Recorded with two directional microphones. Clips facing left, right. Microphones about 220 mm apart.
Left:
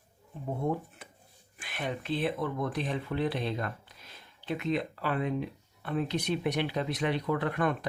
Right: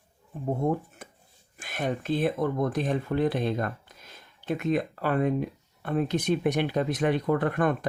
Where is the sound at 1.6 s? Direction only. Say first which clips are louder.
Right 5 dB; 45° right (ahead or behind).